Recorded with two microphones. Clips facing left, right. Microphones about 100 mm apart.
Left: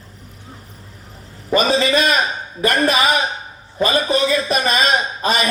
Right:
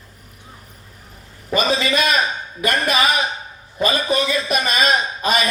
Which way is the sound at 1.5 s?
35° left (ahead or behind).